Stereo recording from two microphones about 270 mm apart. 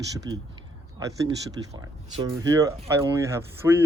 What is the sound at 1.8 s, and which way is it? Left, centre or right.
Speech, centre.